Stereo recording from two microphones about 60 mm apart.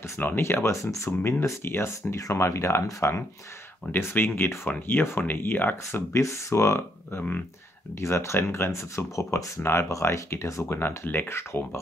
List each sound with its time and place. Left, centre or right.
0.4 s speech: left
1.6 s speech: left
2.1 s speech: left
3.9 s speech: left
9.6 s speech: left
9.8 s speech: left
11.1 s speech: left